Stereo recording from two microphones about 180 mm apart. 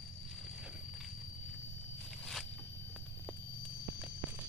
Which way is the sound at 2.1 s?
Centre (ahead or behind).